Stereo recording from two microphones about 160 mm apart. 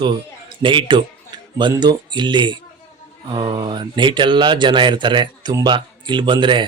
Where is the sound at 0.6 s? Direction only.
30° right (ahead or behind).